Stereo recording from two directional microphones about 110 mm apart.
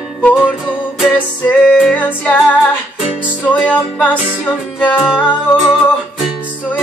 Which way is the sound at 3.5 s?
10° left (ahead or behind).